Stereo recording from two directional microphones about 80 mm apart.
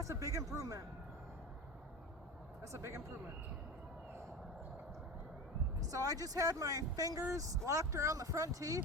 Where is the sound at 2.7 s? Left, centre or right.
Right.